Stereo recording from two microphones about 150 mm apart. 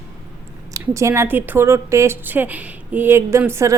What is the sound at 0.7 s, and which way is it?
A woman's voice, 20° right (ahead or behind).